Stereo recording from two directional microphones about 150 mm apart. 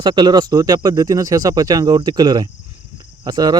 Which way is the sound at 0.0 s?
30° right (ahead or behind).